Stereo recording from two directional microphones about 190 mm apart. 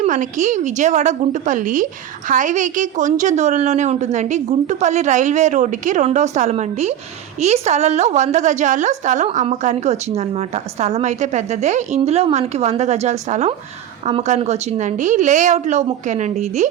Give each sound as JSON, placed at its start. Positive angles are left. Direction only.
{"t": 0.0, "sound": "a woman's voice", "side_deg": -40}